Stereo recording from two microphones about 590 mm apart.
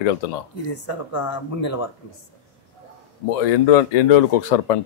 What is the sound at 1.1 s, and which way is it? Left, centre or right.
Speech, left.